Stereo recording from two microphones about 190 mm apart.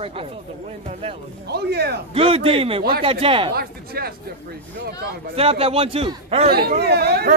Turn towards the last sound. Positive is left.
turn(degrees=-55)  # may be behind; listen again after turning